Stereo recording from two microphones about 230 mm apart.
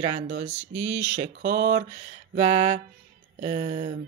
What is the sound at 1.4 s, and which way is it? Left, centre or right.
Speech, right.